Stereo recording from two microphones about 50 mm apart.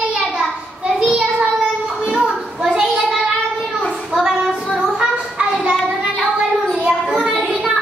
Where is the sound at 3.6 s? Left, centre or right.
Centre.